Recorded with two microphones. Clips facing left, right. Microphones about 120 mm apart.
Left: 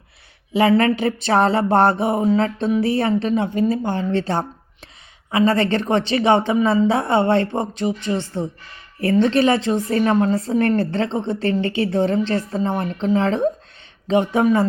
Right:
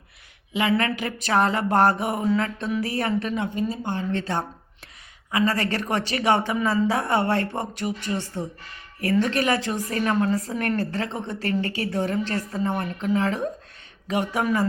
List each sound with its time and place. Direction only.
0.5 s a woman's voice: 35° left (ahead or behind)